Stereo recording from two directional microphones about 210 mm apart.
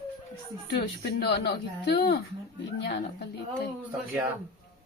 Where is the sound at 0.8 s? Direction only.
50° left (ahead or behind).